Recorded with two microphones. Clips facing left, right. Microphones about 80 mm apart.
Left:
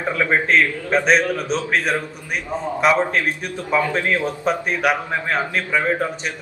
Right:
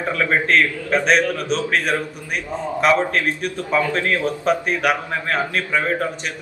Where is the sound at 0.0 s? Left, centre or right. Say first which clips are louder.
Even; centre.